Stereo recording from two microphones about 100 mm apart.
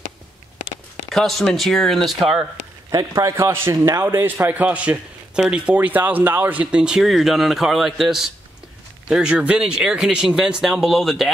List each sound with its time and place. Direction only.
1.1 s speech: 5° left (ahead or behind)
2.9 s a man's voice: 35° right (ahead or behind); by 11.2 s centre (ahead or behind)